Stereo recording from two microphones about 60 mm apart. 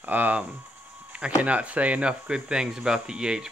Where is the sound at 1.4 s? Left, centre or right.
Right.